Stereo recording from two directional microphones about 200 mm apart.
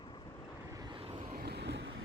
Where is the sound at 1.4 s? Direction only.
55° right (ahead or behind).